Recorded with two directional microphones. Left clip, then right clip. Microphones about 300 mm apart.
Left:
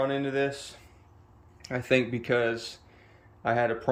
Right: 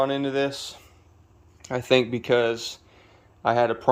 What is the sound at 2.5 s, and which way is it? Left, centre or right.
Speech, right.